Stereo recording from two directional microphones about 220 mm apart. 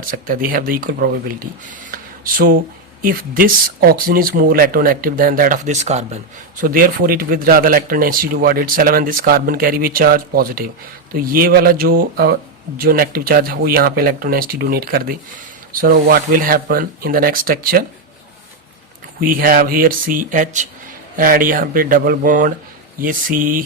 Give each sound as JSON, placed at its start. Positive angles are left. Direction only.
{"t": 0.1, "sound": "speech", "side_deg": -40}
{"t": 6.6, "sound": "speech", "side_deg": -40}
{"t": 19.2, "sound": "speech", "side_deg": -40}